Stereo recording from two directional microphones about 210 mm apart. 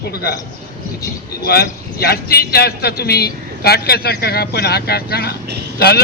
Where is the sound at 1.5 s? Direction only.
50° left (ahead or behind).